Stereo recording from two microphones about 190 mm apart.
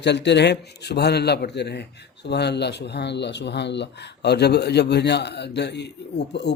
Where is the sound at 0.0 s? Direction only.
65° left (ahead or behind).